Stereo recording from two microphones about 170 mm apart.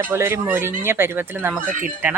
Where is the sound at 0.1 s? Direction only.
15° right (ahead or behind).